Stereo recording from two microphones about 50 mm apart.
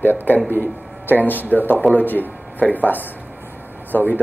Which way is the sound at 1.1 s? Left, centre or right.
Left.